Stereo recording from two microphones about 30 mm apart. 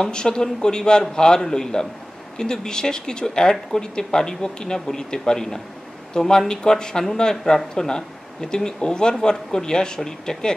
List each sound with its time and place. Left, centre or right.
0.1 s speech: left